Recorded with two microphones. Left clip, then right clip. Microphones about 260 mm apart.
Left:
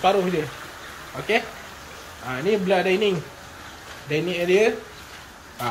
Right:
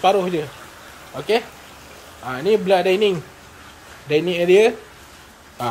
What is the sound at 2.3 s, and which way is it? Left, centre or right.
Speech, centre.